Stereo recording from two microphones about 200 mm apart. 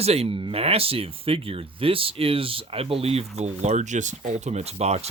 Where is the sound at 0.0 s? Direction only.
30° right (ahead or behind).